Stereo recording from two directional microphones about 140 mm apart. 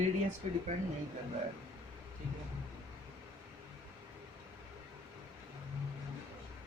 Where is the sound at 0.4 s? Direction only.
50° right (ahead or behind).